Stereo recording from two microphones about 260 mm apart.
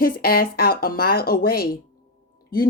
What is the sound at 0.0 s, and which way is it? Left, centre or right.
Speech, left.